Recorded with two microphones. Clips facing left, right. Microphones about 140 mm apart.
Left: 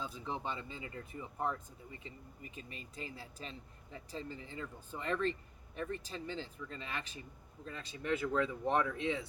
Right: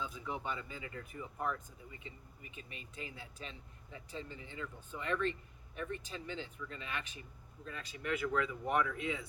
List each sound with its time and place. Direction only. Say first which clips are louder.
0.0 s speech: left 1 dB; 30° left (ahead or behind)